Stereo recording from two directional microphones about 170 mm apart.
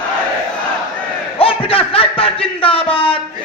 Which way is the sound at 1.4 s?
30° left (ahead or behind).